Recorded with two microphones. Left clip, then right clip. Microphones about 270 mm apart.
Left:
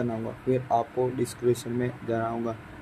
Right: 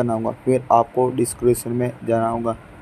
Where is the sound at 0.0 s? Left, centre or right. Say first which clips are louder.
Right 9 dB; centre.